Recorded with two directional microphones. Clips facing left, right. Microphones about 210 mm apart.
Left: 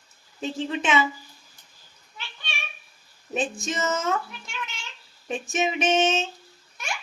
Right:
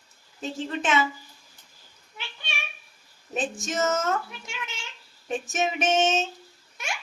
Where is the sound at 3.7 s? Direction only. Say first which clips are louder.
Right 3 dB; centre (ahead or behind).